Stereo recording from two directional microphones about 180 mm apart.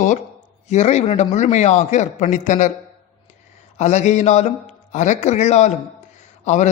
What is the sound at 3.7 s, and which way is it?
A man's voice, 40° left (ahead or behind).